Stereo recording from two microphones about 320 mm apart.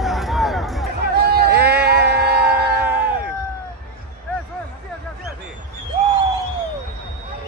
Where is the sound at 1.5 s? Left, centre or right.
Centre.